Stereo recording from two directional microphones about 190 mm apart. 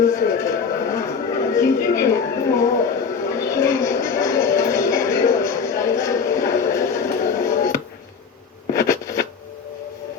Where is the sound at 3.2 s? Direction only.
15° left (ahead or behind).